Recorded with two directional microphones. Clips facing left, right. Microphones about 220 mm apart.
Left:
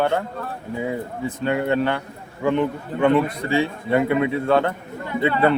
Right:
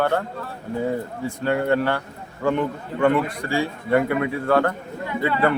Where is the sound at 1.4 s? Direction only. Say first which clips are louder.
Even; 20° left (ahead or behind).